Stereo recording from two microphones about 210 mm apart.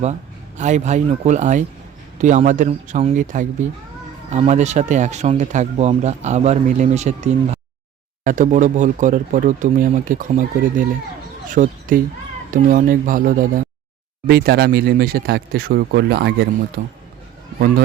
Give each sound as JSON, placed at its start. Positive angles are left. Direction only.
{"t": 0.0, "sound": "speech", "side_deg": -35}